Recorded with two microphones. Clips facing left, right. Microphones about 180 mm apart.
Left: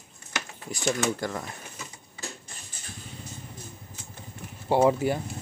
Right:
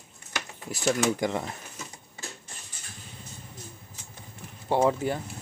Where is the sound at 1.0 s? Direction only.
20° right (ahead or behind).